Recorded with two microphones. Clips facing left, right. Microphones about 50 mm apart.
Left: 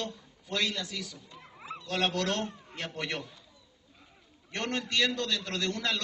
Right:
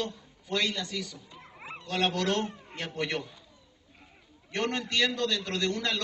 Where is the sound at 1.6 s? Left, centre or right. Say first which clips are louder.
Left 1 dB; right.